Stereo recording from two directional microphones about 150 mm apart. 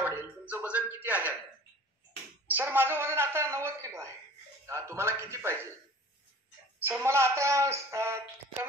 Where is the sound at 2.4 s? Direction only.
15° right (ahead or behind).